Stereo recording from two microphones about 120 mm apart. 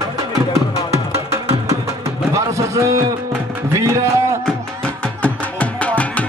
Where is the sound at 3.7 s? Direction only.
25° right (ahead or behind).